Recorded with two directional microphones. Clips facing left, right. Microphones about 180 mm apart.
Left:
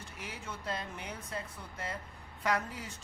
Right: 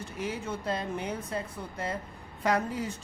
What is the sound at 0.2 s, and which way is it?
A woman's voice, 25° right (ahead or behind).